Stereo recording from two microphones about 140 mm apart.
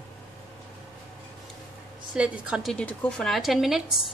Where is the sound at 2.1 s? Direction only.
10° right (ahead or behind).